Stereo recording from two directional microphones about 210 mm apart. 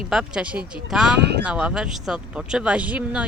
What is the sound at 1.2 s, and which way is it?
Speech, 50° right (ahead or behind).